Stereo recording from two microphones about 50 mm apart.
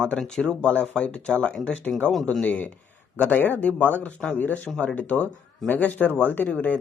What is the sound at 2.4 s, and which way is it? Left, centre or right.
Speech, left.